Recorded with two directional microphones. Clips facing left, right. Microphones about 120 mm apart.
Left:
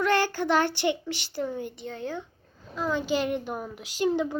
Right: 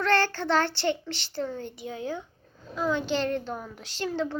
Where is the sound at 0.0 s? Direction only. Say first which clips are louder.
Left 1 dB; 10° left (ahead or behind).